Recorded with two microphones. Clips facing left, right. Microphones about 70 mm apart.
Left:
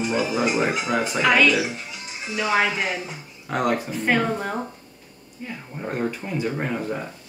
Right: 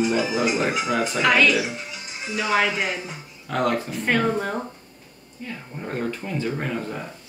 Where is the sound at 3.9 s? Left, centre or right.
Centre.